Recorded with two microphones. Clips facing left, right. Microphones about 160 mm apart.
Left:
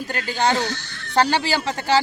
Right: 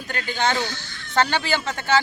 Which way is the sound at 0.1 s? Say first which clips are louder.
Left 2 dB; 35° left (ahead or behind).